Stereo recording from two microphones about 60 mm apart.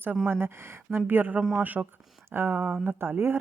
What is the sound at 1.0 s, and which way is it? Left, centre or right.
A woman's voice, right.